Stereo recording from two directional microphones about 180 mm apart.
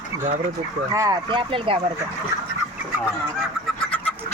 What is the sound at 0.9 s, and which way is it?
Speech, 20° right (ahead or behind).